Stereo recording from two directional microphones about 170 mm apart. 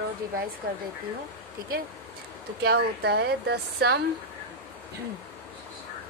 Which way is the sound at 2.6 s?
70° right (ahead or behind).